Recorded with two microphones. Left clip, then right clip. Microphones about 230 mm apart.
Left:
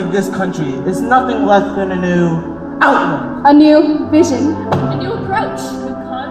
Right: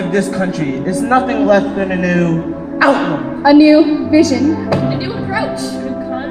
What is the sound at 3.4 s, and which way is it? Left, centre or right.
Speech, left.